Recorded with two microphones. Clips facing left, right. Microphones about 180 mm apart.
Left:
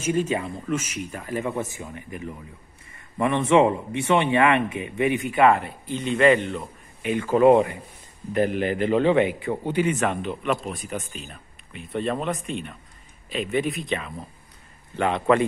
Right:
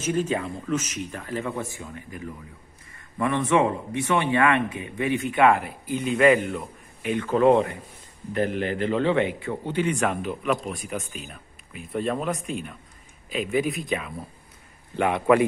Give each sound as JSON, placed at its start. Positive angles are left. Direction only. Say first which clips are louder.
{"t": 0.0, "sound": "speech", "louder": "left 1 dB", "side_deg": 10}
{"t": 5.3, "sound": "a man's voice", "louder": "even", "side_deg": 0}